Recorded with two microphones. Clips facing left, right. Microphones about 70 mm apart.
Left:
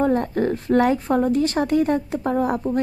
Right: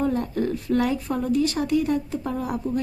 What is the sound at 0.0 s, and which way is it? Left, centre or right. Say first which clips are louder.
A woman's voice: left 4 dB; left.